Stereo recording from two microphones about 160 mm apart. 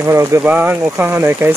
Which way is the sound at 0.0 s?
15° right (ahead or behind).